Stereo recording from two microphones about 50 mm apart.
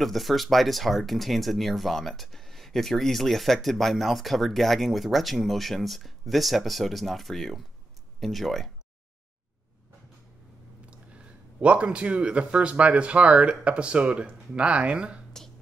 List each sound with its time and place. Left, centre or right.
0.0 s speech: centre
11.6 s speech: right